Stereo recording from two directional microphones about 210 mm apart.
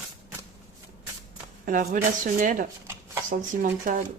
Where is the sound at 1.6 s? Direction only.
40° right (ahead or behind).